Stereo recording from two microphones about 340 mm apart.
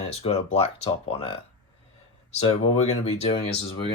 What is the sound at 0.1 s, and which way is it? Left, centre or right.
Speech, centre.